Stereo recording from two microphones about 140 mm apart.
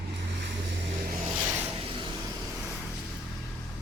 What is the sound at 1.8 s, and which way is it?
Vehicle, 40° right (ahead or behind).